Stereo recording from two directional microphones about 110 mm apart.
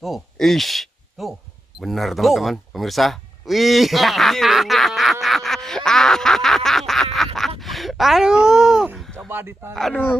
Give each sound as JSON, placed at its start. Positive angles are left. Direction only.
{"t": 0.0, "sound": "speech", "side_deg": 0}
{"t": 5.2, "sound": "snicker", "side_deg": 0}
{"t": 7.3, "sound": "speech", "side_deg": 0}
{"t": 8.9, "sound": "a sound", "side_deg": 0}
{"t": 9.3, "sound": "speech", "side_deg": -20}